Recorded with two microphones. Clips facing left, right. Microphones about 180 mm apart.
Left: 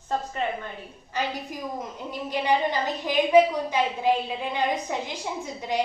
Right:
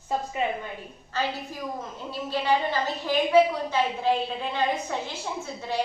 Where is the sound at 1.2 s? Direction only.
15° left (ahead or behind).